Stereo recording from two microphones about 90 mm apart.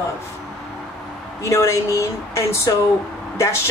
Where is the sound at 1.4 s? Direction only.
35° left (ahead or behind).